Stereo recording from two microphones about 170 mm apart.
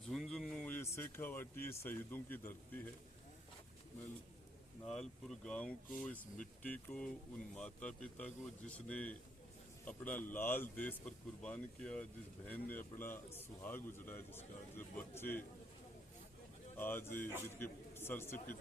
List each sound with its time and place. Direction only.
0.1 s a sound: centre (ahead or behind)
1.6 s a man's voice: 15° left (ahead or behind)
4.9 s speech: 5° left (ahead or behind)
6.1 s speech: 50° left (ahead or behind)
6.6 s a man's voice: 5° left (ahead or behind)
16.7 s a man's voice: 10° left (ahead or behind)